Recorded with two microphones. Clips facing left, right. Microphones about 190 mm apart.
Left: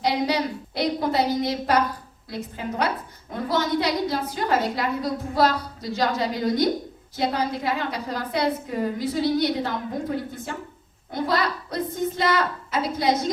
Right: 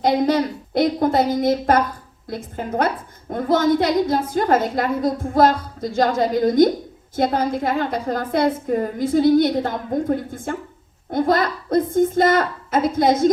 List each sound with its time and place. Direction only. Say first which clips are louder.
0.0 s a woman's voice: right 6 dB; 50° right (ahead or behind)